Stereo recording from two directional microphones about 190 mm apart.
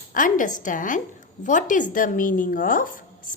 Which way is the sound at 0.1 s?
45° left (ahead or behind).